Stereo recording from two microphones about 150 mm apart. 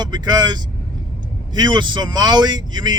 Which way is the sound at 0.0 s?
25° right (ahead or behind).